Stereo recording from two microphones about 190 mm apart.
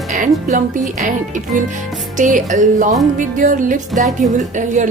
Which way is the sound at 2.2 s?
40° right (ahead or behind).